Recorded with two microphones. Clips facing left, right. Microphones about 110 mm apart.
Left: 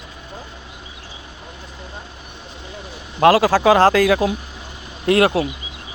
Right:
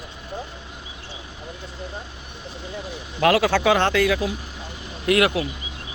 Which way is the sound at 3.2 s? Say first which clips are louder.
Left 5 dB; 35° left (ahead or behind).